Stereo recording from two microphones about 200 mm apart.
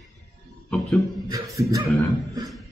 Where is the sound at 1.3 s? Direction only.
15° right (ahead or behind).